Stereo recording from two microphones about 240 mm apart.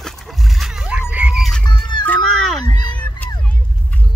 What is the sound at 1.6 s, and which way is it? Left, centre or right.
Music, centre.